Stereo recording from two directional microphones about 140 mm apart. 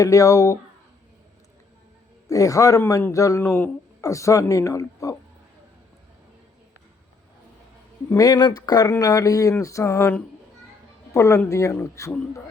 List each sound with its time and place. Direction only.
0.0 s speech: 25° left (ahead or behind)
2.2 s speech: 25° left (ahead or behind)
8.1 s speech: 25° left (ahead or behind)